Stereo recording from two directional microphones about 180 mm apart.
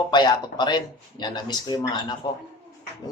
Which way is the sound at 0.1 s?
25° left (ahead or behind).